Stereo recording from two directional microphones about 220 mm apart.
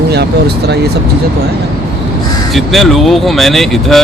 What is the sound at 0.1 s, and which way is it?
Speech, 50° right (ahead or behind).